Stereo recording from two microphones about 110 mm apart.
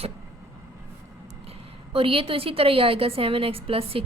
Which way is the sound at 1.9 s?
55° right (ahead or behind).